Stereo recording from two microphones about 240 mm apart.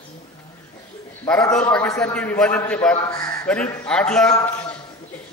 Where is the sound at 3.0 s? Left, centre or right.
Centre.